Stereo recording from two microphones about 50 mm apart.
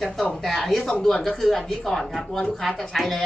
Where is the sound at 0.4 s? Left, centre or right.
Centre.